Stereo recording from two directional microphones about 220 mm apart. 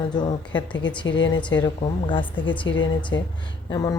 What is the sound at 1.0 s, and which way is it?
Speech, 55° left (ahead or behind).